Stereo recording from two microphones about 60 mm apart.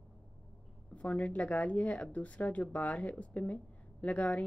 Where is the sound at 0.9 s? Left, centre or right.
Left.